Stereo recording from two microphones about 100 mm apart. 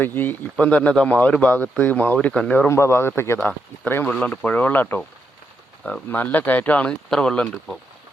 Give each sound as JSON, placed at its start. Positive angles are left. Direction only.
{"t": 0.0, "sound": "speech", "side_deg": 20}
{"t": 2.6, "sound": "speech", "side_deg": 30}
{"t": 4.1, "sound": "speech", "side_deg": 10}